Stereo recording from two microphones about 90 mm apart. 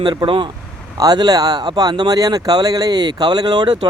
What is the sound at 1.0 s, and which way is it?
Speech, 45° right (ahead or behind).